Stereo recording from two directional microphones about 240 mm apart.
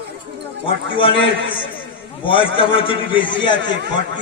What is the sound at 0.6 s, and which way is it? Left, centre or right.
A man's voice, left.